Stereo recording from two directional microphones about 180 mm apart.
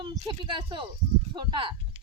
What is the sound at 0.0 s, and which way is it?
Speech, 20° right (ahead or behind).